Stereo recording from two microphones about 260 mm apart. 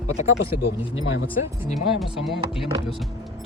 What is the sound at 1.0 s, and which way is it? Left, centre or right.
Speech, left.